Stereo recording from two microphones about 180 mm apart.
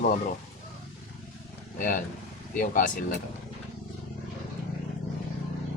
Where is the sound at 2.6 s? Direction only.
45° left (ahead or behind).